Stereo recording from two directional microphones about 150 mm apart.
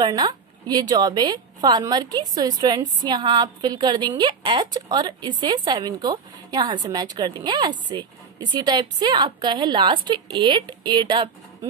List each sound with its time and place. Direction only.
0.0 s speech: 25° right (ahead or behind)